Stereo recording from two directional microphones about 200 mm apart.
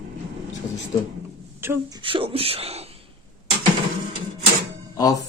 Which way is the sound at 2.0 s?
25° right (ahead or behind).